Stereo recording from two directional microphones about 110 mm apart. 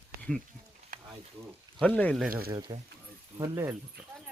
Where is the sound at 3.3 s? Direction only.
30° right (ahead or behind).